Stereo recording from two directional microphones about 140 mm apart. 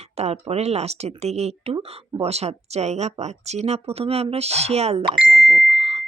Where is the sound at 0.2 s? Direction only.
50° right (ahead or behind).